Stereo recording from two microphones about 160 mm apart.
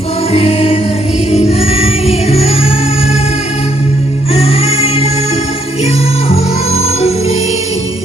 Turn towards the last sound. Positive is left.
turn(degrees=40)  # may be behind; listen again after turning